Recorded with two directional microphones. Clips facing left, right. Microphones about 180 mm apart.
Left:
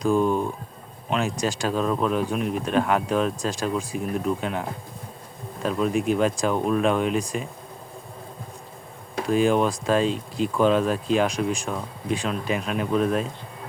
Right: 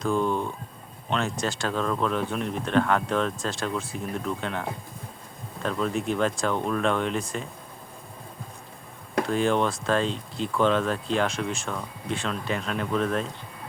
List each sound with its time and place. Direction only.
0.0 s speech: 15° left (ahead or behind)
5.6 s speech: 15° left (ahead or behind)
9.3 s speech: 15° left (ahead or behind)